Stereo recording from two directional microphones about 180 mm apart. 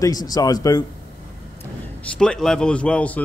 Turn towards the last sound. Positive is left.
turn(degrees=5)  # may be behind; listen again after turning